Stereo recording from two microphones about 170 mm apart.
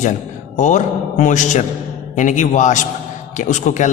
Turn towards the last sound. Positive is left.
turn(degrees=45)  # may be behind; listen again after turning